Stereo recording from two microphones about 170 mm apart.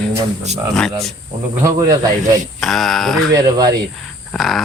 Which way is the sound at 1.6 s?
20° right (ahead or behind).